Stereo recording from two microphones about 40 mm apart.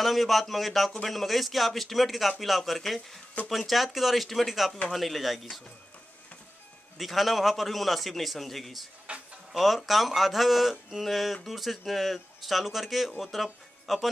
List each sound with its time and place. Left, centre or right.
0.0 s a man's voice: centre
7.0 s a man's voice: centre
9.1 s a sound: right
9.5 s a man's voice: centre